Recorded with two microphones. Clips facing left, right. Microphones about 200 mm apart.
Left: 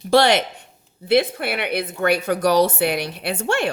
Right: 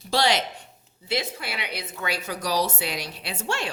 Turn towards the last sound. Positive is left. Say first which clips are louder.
# left 8 dB
turn(degrees=55)  # may be behind; listen again after turning